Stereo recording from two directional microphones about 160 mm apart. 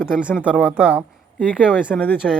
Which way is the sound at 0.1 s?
5° right (ahead or behind).